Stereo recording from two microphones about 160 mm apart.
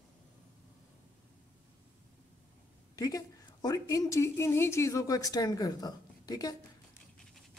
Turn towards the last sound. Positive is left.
turn(degrees=25)  # may be behind; listen again after turning